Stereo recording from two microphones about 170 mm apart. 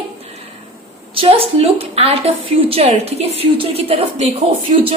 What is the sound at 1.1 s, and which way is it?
A woman's voice, 35° right (ahead or behind).